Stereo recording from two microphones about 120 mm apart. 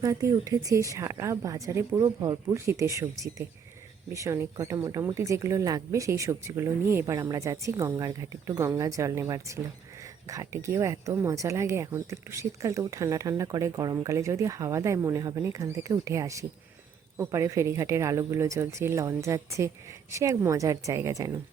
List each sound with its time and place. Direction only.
0.0 s speech: 25° right (ahead or behind)
2.0 s speech: 35° right (ahead or behind)
2.5 s speech: 25° right (ahead or behind)